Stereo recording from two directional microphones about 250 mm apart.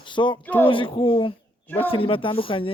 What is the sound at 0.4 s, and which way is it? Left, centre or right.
Speech, centre.